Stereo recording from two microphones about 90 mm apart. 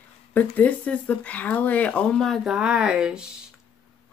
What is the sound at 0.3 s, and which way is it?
Speech, 20° left (ahead or behind).